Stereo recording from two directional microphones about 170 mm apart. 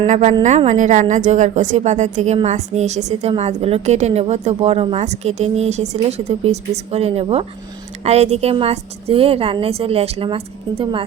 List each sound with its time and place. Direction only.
0.0 s a woman's voice: 40° right (ahead or behind)